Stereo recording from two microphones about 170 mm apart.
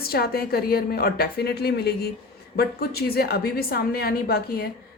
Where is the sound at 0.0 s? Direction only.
65° left (ahead or behind).